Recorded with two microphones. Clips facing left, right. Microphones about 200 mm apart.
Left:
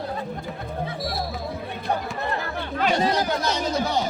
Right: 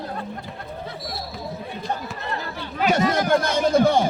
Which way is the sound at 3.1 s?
50° right (ahead or behind).